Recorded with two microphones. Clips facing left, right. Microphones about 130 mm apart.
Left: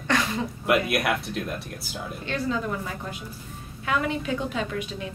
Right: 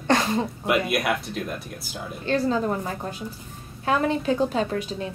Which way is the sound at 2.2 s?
35° right (ahead or behind).